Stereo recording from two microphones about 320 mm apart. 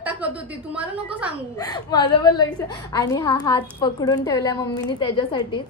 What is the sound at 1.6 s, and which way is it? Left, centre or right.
A woman's voice, centre.